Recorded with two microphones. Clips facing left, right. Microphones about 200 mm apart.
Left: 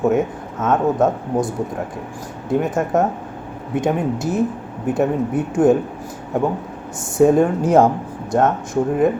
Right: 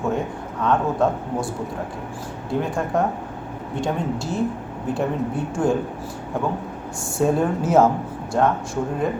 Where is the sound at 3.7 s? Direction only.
20° left (ahead or behind).